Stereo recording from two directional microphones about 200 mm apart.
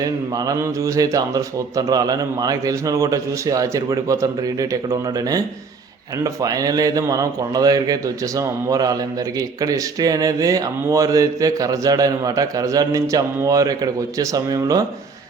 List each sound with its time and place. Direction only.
0.0 s a man's voice: 15° right (ahead or behind)